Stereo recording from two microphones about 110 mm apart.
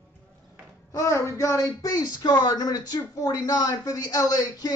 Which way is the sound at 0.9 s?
25° left (ahead or behind).